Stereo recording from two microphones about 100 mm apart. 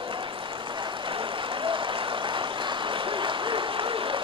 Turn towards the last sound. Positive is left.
turn(degrees=-60)  # may be behind; listen again after turning